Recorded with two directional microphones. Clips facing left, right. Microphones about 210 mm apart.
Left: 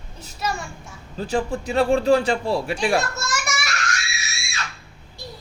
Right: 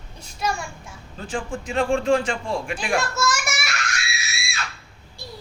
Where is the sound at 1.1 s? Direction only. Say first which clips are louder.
Left 5 dB; 40° left (ahead or behind).